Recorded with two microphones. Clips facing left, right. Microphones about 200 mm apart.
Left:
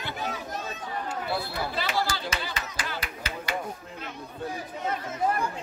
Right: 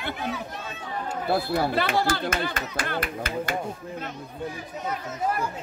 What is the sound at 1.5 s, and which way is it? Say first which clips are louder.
Speech: right 6 dB; 55° right (ahead or behind).